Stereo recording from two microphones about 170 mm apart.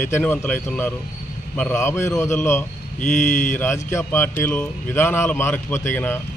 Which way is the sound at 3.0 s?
45° left (ahead or behind).